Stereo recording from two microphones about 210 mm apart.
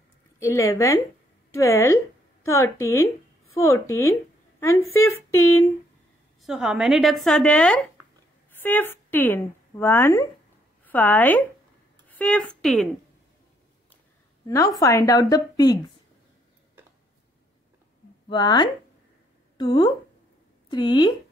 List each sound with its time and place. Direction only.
0.4 s a woman's voice: 15° left (ahead or behind)
6.4 s a woman's voice: 5° right (ahead or behind)
14.8 s a woman's voice: 15° left (ahead or behind)
18.3 s a woman's voice: 20° left (ahead or behind)